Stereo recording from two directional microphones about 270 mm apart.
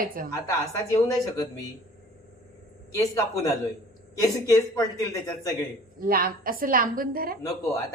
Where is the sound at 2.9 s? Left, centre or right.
Centre.